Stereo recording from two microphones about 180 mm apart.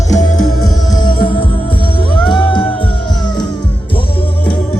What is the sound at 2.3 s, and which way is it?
Music, 25° left (ahead or behind).